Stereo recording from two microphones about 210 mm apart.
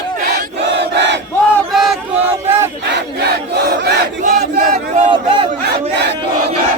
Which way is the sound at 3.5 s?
50° right (ahead or behind).